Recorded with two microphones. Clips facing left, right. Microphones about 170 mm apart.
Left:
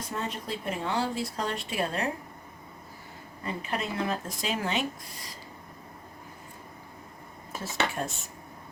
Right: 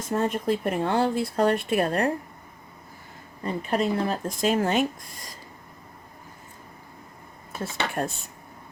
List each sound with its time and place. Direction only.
0.1 s speech: 50° right (ahead or behind)
3.4 s a woman's voice: 40° right (ahead or behind)
4.4 s speech: 50° right (ahead or behind)
7.6 s speech: 55° right (ahead or behind)